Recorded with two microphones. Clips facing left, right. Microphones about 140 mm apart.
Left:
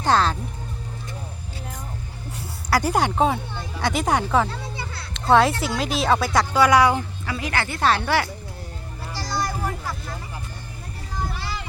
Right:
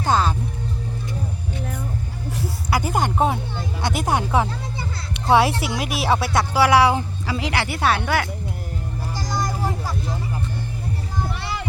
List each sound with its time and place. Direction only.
0.0 s music: 10° right (ahead or behind)
2.9 s speech: 5° right (ahead or behind)
5.1 s music: 10° right (ahead or behind)
5.5 s speech: 5° right (ahead or behind)
9.1 s music: 15° right (ahead or behind)
11.3 s music: 65° right (ahead or behind)